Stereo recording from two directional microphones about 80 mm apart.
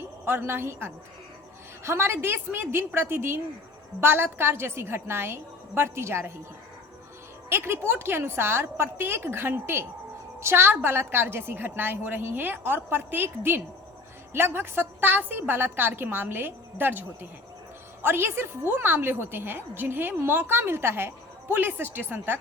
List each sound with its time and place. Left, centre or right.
0.3 s a woman's voice: right
7.5 s a woman's voice: right